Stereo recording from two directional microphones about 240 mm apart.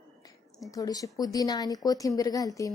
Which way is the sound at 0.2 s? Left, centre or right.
Centre.